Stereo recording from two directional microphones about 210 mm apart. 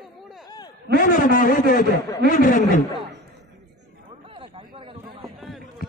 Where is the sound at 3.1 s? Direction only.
55° right (ahead or behind).